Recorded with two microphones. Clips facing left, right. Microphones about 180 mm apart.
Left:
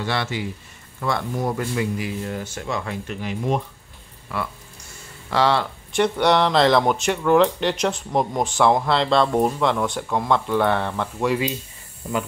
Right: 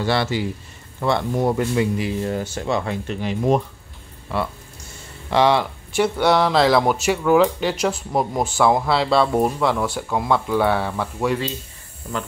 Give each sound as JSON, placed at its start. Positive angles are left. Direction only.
{"t": 0.0, "sound": "speech", "side_deg": -35}
{"t": 5.3, "sound": "speech", "side_deg": -15}